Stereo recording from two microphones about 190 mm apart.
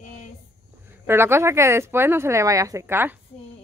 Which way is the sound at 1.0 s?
10° right (ahead or behind).